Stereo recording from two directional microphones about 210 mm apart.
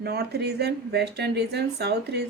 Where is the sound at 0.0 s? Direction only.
50° right (ahead or behind).